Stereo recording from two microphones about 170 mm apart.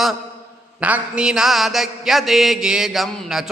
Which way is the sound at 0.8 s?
10° right (ahead or behind).